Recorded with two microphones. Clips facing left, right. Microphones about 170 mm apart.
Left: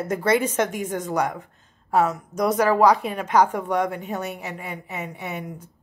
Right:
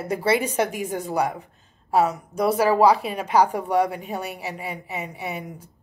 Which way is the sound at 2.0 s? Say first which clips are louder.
Right 1 dB; 35° right (ahead or behind).